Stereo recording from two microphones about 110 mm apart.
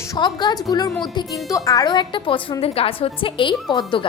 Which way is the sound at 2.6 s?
60° left (ahead or behind).